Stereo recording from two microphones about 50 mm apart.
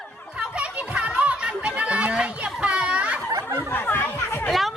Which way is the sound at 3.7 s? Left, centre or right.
Left.